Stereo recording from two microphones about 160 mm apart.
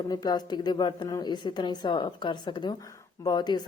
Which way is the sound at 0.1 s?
25° left (ahead or behind).